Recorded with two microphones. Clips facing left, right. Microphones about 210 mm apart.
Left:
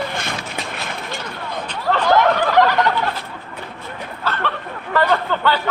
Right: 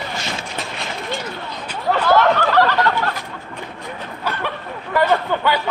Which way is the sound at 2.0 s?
15° left (ahead or behind).